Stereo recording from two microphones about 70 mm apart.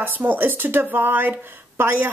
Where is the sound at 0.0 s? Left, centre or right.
Right.